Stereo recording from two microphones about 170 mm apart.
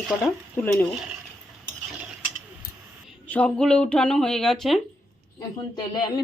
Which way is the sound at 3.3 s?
5° left (ahead or behind).